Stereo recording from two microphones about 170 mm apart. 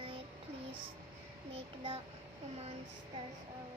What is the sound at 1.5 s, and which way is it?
Child singing, 35° right (ahead or behind).